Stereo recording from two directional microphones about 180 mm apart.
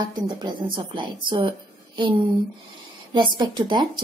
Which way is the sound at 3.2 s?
25° right (ahead or behind).